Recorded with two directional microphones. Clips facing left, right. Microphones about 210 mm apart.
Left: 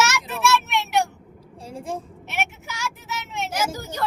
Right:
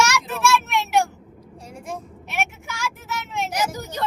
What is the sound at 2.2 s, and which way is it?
Vehicle, centre (ahead or behind).